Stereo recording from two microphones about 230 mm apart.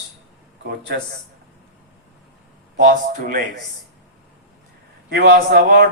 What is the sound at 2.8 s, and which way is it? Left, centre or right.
Speech, right.